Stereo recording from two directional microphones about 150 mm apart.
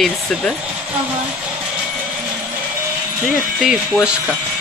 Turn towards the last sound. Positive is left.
turn(degrees=0)  # may be behind; listen again after turning